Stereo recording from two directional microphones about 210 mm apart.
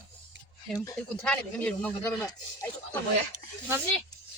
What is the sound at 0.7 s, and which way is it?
Speech, 5° left (ahead or behind).